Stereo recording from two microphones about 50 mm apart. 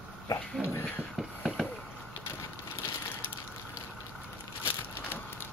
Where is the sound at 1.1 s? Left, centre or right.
Centre.